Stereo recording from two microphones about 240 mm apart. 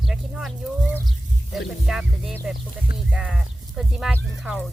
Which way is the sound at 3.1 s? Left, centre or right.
Centre.